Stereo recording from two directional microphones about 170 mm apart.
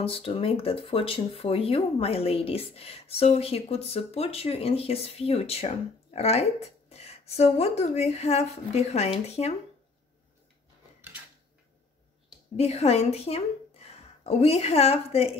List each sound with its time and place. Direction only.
0.0 s speech: 35° left (ahead or behind)
12.5 s a woman's voice: 40° left (ahead or behind)